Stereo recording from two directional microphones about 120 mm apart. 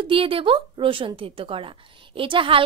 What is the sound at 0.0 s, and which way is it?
Speech, 50° right (ahead or behind).